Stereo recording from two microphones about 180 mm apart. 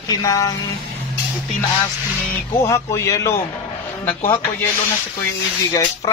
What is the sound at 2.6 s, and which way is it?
Speech, 15° left (ahead or behind).